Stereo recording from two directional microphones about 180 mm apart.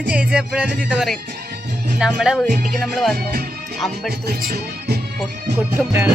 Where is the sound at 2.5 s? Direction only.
50° right (ahead or behind).